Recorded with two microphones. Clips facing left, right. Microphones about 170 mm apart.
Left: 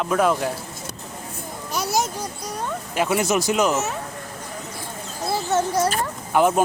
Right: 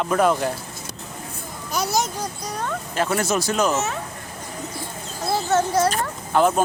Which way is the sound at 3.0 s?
10° left (ahead or behind).